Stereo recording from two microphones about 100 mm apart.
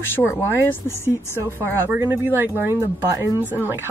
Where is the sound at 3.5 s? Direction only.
20° right (ahead or behind).